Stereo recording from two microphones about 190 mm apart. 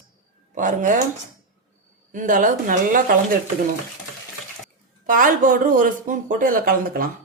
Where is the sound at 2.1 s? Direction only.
45° right (ahead or behind).